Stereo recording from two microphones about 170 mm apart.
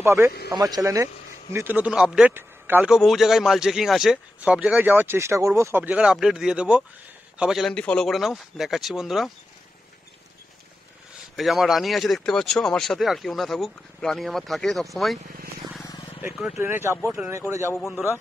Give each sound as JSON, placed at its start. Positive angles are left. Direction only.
{"t": 0.0, "sound": "a man's voice", "side_deg": -15}
{"t": 11.3, "sound": "speech", "side_deg": 0}
{"t": 15.8, "sound": "vehicle", "side_deg": 25}
{"t": 16.2, "sound": "a man's voice", "side_deg": -5}
{"t": 17.5, "sound": "a man's voice", "side_deg": -15}